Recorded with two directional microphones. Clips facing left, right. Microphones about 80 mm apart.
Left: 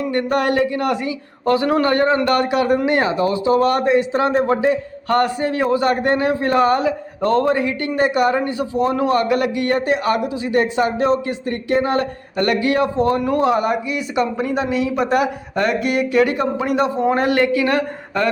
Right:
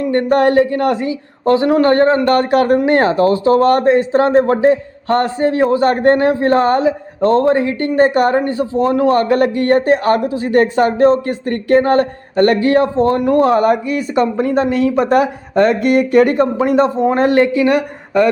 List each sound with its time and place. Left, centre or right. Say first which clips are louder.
0.1 s a man's voice: right 7 dB; right; by 18.3 s centre